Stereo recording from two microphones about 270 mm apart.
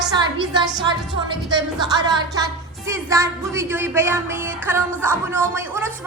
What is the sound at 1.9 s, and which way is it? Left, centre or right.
A woman's voice, centre.